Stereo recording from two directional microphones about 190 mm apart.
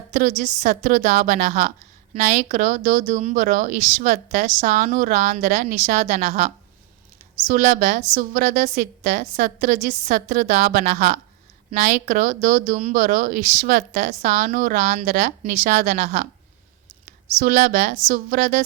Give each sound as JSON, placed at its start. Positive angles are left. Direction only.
{"t": 0.1, "sound": "a woman's voice", "side_deg": -40}